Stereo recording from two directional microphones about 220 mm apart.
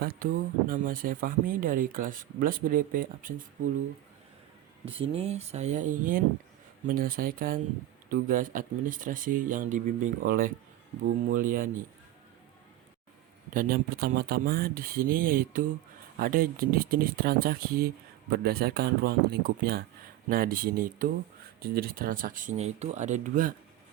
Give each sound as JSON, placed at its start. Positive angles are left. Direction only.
{"t": 0.0, "sound": "speech", "side_deg": -45}
{"t": 4.9, "sound": "speech", "side_deg": -25}
{"t": 13.5, "sound": "speech", "side_deg": -40}